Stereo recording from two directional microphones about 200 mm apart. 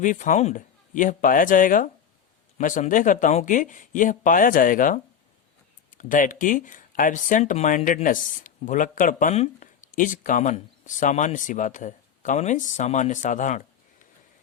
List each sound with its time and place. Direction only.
0.0 s speech: 40° left (ahead or behind)
6.0 s speech: 40° left (ahead or behind)